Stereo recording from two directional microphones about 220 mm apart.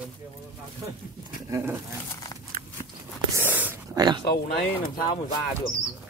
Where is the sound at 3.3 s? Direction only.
10° right (ahead or behind).